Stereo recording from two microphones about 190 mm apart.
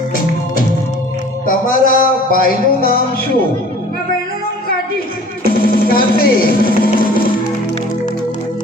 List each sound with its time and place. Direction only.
1.5 s music: 45° left (ahead or behind)
5.4 s music: 50° left (ahead or behind)